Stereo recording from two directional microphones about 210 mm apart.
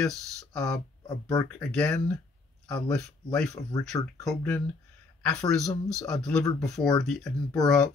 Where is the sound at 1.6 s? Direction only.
5° left (ahead or behind).